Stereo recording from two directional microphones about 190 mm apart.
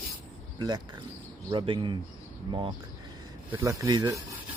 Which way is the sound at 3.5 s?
15° right (ahead or behind).